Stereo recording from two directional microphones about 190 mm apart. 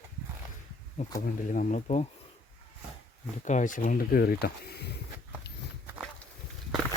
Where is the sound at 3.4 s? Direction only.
40° left (ahead or behind); by 4.9 s 55° left (ahead or behind).